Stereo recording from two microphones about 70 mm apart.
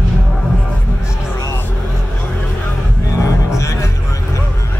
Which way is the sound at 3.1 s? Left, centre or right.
Left.